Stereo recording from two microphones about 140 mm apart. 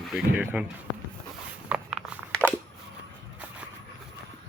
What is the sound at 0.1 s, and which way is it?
Speech, 10° right (ahead or behind).